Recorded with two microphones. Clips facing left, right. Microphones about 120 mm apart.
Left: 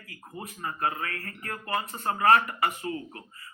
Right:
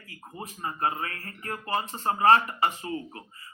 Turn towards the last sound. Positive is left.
turn(degrees=-25)  # may be behind; listen again after turning